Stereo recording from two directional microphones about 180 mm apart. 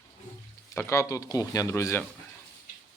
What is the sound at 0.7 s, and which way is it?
Speech, 15° left (ahead or behind).